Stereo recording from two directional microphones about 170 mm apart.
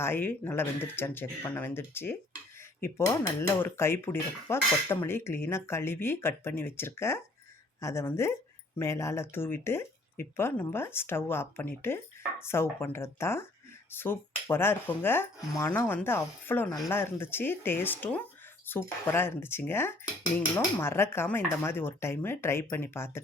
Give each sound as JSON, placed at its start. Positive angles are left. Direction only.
{"t": 0.0, "sound": "speech", "side_deg": 10}